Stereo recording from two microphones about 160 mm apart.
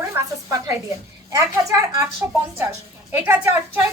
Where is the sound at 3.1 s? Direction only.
10° right (ahead or behind).